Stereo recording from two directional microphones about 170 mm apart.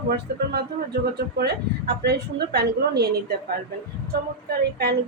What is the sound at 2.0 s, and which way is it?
Speech, 70° right (ahead or behind).